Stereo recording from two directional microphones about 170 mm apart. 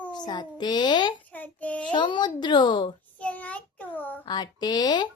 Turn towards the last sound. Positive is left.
turn(degrees=25)  # may be behind; listen again after turning